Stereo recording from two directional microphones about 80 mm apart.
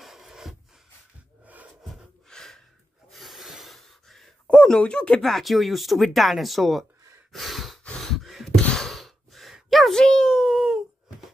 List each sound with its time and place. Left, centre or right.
0.0 s a sound: centre
1.4 s wood: centre
2.2 s gasp: centre
3.1 s snort: centre
4.5 s speech: centre
5.2 s speech: centre
7.3 s breathing: centre
7.8 s a sound: centre
8.5 s sigh: centre